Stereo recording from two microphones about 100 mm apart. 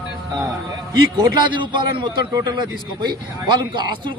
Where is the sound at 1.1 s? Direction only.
45° right (ahead or behind).